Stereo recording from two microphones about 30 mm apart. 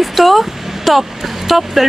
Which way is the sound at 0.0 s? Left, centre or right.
Centre.